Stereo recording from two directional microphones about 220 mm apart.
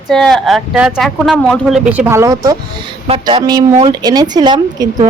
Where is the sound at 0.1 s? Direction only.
Centre (ahead or behind).